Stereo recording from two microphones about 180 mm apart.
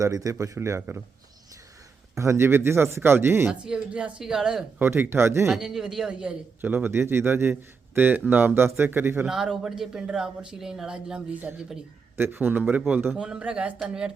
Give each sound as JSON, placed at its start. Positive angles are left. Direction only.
{"t": 0.0, "sound": "speech", "side_deg": -20}
{"t": 2.1, "sound": "speech", "side_deg": -15}
{"t": 5.5, "sound": "speech", "side_deg": -5}